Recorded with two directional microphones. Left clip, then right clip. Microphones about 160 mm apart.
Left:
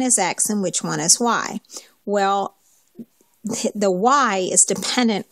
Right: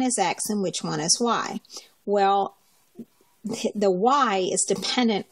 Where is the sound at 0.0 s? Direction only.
45° left (ahead or behind).